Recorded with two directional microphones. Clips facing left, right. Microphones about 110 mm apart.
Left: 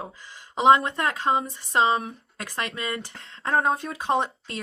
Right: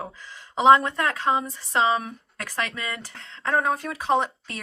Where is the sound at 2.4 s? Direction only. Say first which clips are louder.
Right 1 dB; 25° left (ahead or behind).